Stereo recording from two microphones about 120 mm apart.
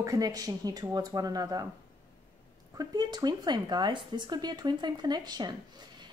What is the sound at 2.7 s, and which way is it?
A woman's voice, 35° right (ahead or behind).